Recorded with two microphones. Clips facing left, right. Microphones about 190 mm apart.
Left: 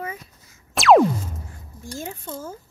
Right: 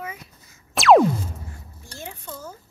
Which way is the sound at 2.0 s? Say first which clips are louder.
Left 3 dB; 45° left (ahead or behind).